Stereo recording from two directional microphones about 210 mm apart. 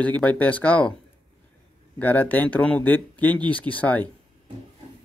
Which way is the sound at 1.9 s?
10° left (ahead or behind).